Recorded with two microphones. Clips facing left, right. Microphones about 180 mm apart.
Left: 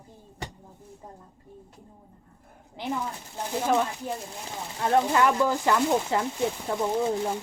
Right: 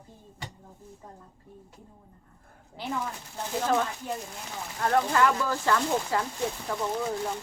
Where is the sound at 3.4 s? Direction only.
15° left (ahead or behind).